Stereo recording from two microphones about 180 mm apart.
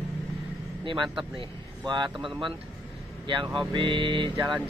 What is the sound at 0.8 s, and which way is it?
Speech, 25° right (ahead or behind).